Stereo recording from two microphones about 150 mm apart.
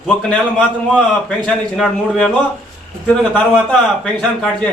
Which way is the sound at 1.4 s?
5° left (ahead or behind).